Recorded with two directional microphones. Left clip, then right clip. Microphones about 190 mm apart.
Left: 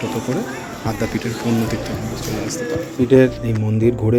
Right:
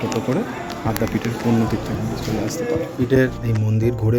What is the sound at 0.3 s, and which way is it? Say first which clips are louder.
Speech: right 1 dB; centre (ahead or behind).